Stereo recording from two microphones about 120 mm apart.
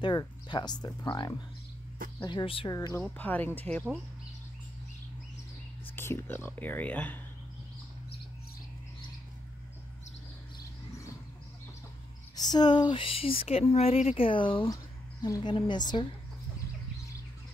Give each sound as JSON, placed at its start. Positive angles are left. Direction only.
{"t": 0.0, "sound": "speech", "side_deg": 35}
{"t": 3.2, "sound": "speech", "side_deg": 15}
{"t": 5.9, "sound": "speech", "side_deg": 20}
{"t": 12.4, "sound": "speech", "side_deg": 35}